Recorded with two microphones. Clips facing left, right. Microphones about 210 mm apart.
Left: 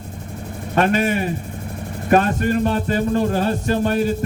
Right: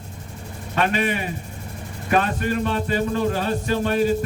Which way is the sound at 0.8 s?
45° left (ahead or behind).